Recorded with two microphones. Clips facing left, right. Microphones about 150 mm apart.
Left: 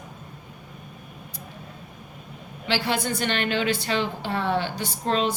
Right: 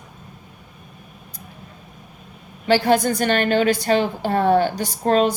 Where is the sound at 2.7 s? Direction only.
45° right (ahead or behind).